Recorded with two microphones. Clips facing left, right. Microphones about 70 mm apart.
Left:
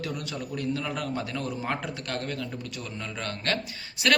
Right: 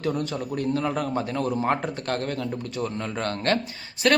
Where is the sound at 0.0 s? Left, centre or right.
Right.